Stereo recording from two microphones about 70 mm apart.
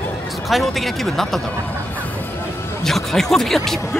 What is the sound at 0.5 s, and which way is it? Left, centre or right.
Speech, centre.